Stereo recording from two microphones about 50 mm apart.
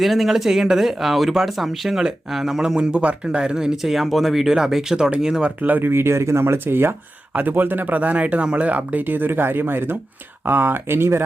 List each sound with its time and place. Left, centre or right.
0.0 s speech: centre
3.8 s speech: centre
5.6 s speech: right
5.9 s speech: right
7.3 s speech: right